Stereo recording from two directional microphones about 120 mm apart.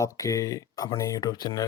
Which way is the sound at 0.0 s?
25° left (ahead or behind).